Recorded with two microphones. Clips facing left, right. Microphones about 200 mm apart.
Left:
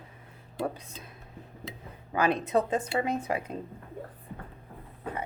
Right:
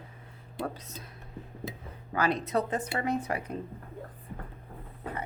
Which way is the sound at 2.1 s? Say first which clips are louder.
Left 2 dB; 20° left (ahead or behind).